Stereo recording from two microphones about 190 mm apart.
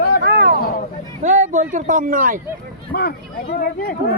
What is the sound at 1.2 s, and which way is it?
Speech, 40° right (ahead or behind).